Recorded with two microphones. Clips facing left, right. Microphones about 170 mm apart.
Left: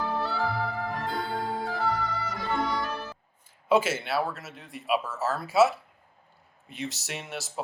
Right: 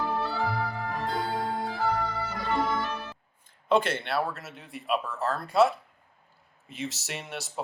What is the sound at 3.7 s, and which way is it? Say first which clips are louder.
Speech: left 1 dB; 5° left (ahead or behind).